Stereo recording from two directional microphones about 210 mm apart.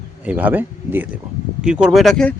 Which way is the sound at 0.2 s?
10° right (ahead or behind).